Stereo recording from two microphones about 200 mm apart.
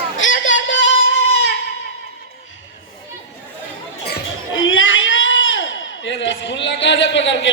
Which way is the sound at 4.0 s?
60° left (ahead or behind).